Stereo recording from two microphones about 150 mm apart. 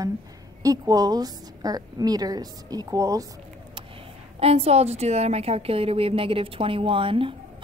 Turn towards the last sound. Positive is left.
turn(degrees=-35)  # may be behind; listen again after turning